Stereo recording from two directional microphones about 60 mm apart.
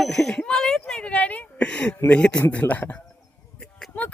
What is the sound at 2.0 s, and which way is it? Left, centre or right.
Speech, centre.